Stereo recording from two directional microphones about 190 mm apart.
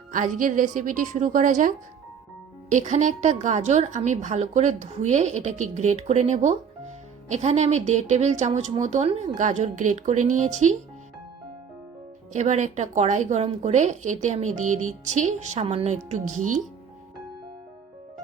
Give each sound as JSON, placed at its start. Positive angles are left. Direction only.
{"t": 0.1, "sound": "a woman's voice", "side_deg": -45}
{"t": 12.3, "sound": "a woman's voice", "side_deg": -40}